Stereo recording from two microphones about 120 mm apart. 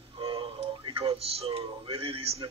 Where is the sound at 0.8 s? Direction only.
50° right (ahead or behind).